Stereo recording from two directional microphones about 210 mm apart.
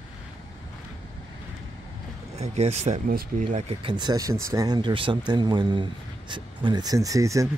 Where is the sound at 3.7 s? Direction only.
25° right (ahead or behind).